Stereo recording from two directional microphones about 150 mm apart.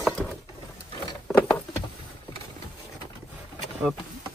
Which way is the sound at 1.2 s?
10° left (ahead or behind).